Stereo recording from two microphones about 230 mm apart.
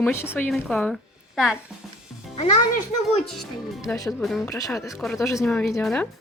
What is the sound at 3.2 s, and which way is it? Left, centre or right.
A woman's voice, centre.